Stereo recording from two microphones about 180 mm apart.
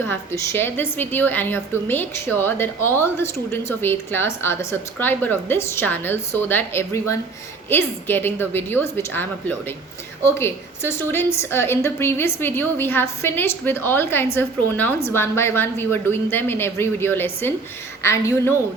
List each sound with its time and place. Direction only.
0.1 s a woman's voice: 15° left (ahead or behind)